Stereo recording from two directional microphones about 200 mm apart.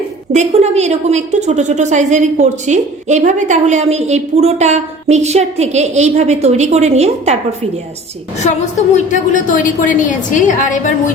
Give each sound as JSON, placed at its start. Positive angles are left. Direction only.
{"t": 0.3, "sound": "a woman's voice", "side_deg": -35}
{"t": 8.4, "sound": "a woman's voice", "side_deg": 35}